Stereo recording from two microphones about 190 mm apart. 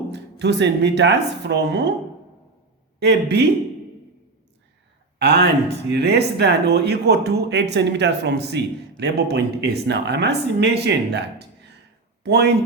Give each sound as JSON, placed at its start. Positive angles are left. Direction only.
{"t": 0.1, "sound": "speech", "side_deg": -65}
{"t": 3.0, "sound": "speech", "side_deg": -60}
{"t": 5.2, "sound": "speech", "side_deg": -60}